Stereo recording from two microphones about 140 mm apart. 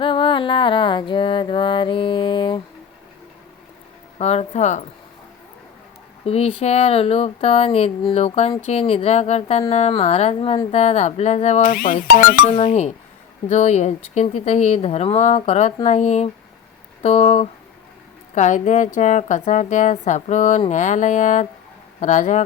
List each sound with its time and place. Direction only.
0.0 s music: 40° left (ahead or behind)
4.2 s a woman's voice: 50° left (ahead or behind)
6.2 s speech: 45° left (ahead or behind)
11.6 s speech: 85° left
13.5 s speech: 55° left (ahead or behind)
18.3 s a woman's voice: 60° left (ahead or behind)